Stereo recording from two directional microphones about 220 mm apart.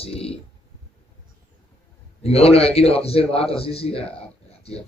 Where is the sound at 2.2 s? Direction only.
25° left (ahead or behind).